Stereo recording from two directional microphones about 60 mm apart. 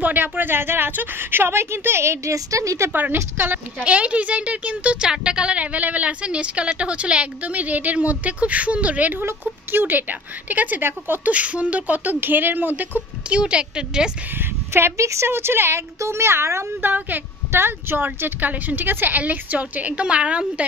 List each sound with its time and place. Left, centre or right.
0.0 s speech: right
2.3 s a woman's voice: right
2.9 s speech: right
3.8 s speech: right
11.2 s speech: right
13.3 s a woman's voice: centre
14.4 s a child's voice: right
16.8 s speech: right